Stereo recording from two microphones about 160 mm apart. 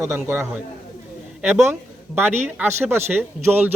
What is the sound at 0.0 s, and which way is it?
Speech, 15° right (ahead or behind).